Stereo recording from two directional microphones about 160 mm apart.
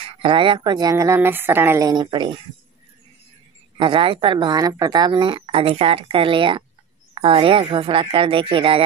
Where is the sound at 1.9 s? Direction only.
25° right (ahead or behind).